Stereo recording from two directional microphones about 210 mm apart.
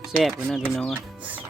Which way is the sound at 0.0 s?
Centre (ahead or behind).